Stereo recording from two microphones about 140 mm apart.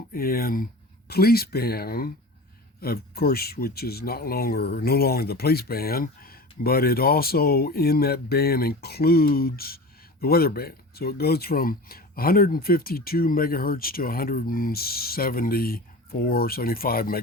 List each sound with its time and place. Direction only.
0.1 s speech: 90° left